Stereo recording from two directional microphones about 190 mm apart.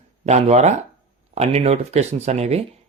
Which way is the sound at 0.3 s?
35° right (ahead or behind).